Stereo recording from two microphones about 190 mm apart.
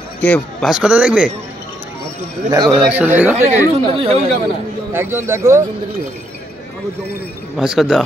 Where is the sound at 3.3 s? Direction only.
35° right (ahead or behind).